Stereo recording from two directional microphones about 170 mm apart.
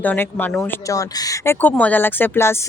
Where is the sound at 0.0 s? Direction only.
10° left (ahead or behind).